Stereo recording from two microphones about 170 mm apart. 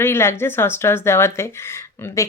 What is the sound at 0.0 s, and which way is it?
Speech, 15° left (ahead or behind).